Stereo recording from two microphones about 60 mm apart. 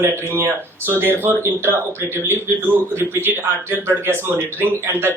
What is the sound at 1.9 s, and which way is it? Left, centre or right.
Speech, left.